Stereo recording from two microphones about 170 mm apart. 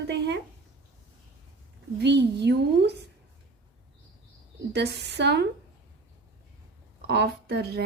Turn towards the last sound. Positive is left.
turn(degrees=-70)  # may be behind; listen again after turning